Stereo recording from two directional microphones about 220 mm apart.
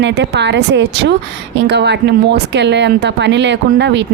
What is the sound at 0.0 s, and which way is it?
Speech, 50° right (ahead or behind).